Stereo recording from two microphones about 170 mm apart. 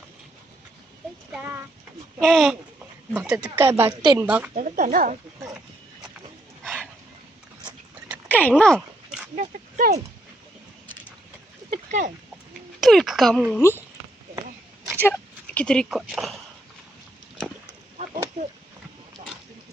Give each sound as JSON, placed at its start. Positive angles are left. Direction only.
{"t": 1.3, "sound": "speech", "side_deg": -10}
{"t": 2.2, "sound": "speech", "side_deg": 0}
{"t": 4.5, "sound": "speech", "side_deg": -50}
{"t": 6.6, "sound": "dog", "side_deg": 5}
{"t": 8.3, "sound": "dog", "side_deg": 10}
{"t": 9.3, "sound": "speech", "side_deg": -50}
{"t": 11.9, "sound": "speech", "side_deg": -50}
{"t": 12.8, "sound": "speech", "side_deg": 0}
{"t": 15.0, "sound": "speech", "side_deg": 10}